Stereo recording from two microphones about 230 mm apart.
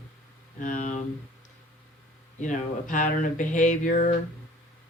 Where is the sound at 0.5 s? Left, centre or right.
Left.